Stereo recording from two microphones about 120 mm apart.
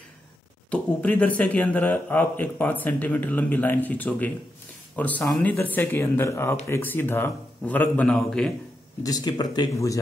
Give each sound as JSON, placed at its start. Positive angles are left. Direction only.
{"t": 0.7, "sound": "speech", "side_deg": 10}
{"t": 9.0, "sound": "speech", "side_deg": 35}